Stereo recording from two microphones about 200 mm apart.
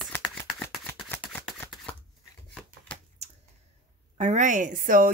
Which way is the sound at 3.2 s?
35° right (ahead or behind).